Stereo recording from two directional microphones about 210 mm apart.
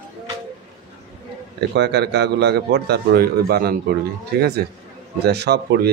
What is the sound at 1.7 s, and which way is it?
Speech, 55° right (ahead or behind).